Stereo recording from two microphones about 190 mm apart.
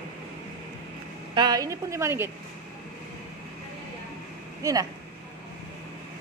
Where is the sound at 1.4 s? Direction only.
20° right (ahead or behind).